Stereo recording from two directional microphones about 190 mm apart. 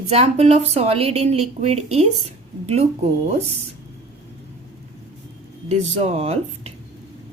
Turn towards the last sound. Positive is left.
turn(degrees=-35)  # may be behind; listen again after turning